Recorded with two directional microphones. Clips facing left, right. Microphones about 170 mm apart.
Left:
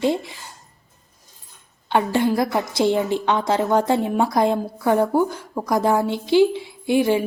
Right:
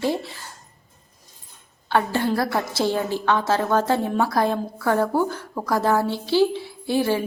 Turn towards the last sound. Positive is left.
turn(degrees=15)  # may be behind; listen again after turning